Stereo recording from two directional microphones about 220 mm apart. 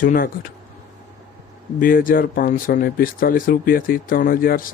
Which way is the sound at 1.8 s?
40° left (ahead or behind).